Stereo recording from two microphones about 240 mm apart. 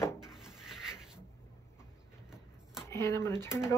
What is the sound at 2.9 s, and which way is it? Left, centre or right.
Speech, centre.